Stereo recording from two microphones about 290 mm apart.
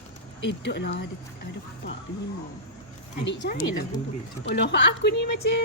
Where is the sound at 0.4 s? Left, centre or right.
Left.